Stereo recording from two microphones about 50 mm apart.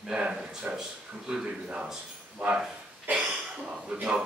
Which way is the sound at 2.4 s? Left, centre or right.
Right.